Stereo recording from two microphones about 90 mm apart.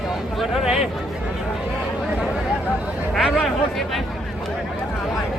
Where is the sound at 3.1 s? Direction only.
Centre (ahead or behind).